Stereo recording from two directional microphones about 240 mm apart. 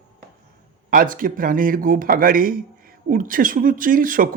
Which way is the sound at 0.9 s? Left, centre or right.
Right.